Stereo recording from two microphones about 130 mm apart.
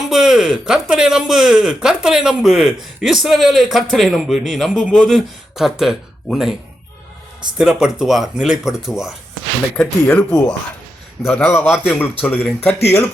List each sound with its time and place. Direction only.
0.1 s speech: 5° right (ahead or behind)
7.6 s speech: 5° right (ahead or behind)
9.7 s a man's voice: 10° left (ahead or behind)
11.5 s a man's voice: 15° left (ahead or behind)